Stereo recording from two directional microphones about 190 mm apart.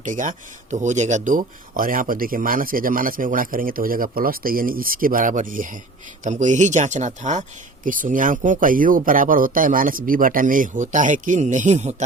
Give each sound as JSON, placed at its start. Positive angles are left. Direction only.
{"t": 0.0, "sound": "speech", "side_deg": -40}